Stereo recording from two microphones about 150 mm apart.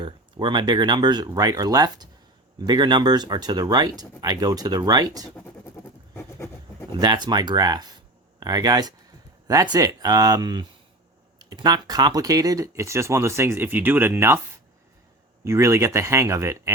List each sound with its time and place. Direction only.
0.0 s speech: 30° right (ahead or behind)
7.0 s speech: 30° right (ahead or behind)
15.4 s speech: 20° right (ahead or behind)